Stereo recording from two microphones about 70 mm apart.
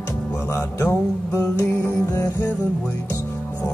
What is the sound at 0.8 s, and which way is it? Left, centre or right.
Music, left.